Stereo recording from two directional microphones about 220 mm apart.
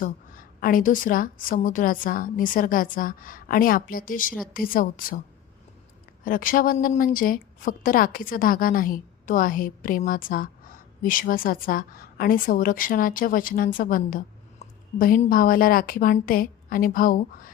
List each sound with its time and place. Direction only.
0.0 s a woman's voice: 40° left (ahead or behind)
6.2 s a woman's voice: 40° left (ahead or behind)